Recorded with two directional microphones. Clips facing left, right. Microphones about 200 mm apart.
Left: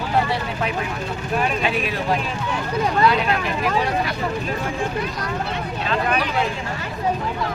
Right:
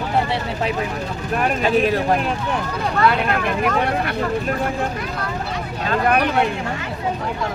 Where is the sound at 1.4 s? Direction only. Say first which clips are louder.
Right 7 dB; 45° right (ahead or behind).